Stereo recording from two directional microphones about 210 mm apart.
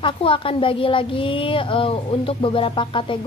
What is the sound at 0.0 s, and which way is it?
Speech, 25° left (ahead or behind).